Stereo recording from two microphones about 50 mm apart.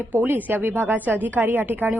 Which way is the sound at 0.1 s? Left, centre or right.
Right.